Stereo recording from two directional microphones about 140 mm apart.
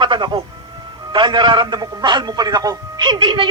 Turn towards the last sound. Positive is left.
turn(degrees=-35)  # may be behind; listen again after turning